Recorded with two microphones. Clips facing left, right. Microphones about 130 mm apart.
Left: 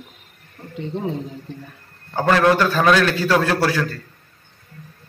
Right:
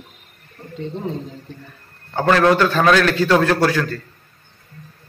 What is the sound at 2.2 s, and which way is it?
Speech, 10° left (ahead or behind).